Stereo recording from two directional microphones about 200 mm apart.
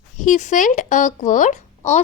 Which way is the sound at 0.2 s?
40° left (ahead or behind).